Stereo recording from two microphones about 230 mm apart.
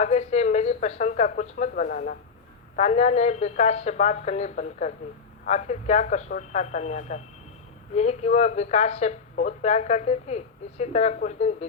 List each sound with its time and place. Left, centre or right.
0.0 s a woman's voice: left